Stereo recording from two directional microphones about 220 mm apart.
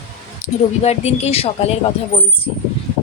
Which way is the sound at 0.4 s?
30° left (ahead or behind).